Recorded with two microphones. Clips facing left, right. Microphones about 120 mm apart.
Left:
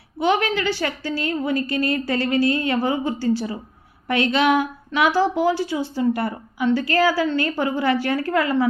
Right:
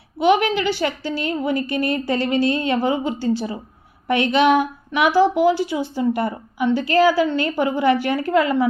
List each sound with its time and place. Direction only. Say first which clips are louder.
0.2 s a woman's voice: right 3 dB; 20° right (ahead or behind)